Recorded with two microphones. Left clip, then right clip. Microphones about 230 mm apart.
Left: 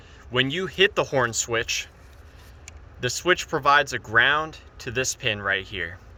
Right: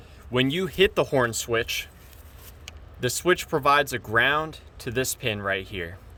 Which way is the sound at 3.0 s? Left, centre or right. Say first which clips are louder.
Left 1 dB; right.